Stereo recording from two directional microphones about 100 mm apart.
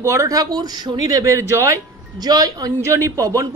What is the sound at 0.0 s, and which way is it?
Speech, 30° right (ahead or behind).